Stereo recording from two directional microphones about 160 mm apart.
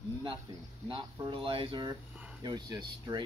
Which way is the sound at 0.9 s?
30° right (ahead or behind).